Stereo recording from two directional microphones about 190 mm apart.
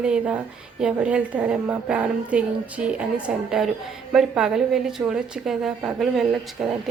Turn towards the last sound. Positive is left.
turn(degrees=0)  # may be behind; listen again after turning